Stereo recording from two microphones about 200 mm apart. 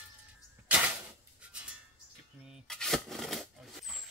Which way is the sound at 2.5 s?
Centre (ahead or behind).